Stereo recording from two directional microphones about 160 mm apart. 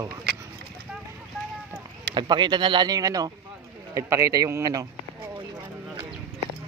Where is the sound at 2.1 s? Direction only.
30° right (ahead or behind).